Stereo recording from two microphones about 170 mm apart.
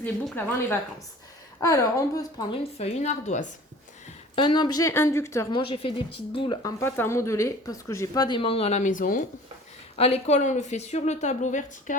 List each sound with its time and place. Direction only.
0.0 s speech: 10° left (ahead or behind)
2.7 s speech: 40° left (ahead or behind)
4.4 s speech: 25° left (ahead or behind)
5.5 s speech: 30° left (ahead or behind)
6.6 s speech: 20° left (ahead or behind); by 9.2 s 50° left (ahead or behind)
9.9 s a woman's voice: 40° left (ahead or behind)